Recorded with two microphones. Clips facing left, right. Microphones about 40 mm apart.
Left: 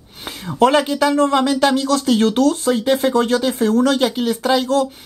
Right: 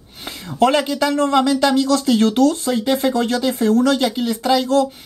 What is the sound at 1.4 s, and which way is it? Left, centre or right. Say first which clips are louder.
Speech: even; centre.